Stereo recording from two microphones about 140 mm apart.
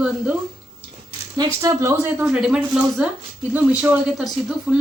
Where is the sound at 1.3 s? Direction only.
20° right (ahead or behind).